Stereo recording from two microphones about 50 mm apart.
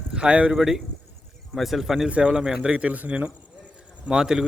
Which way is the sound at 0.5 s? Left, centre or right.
Centre.